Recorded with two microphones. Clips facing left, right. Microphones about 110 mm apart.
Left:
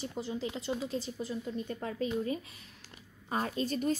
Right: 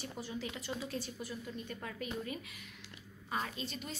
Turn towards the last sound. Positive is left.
turn(degrees=45)  # may be behind; listen again after turning